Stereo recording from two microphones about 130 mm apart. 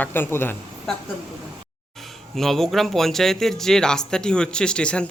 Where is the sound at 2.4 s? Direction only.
Centre (ahead or behind).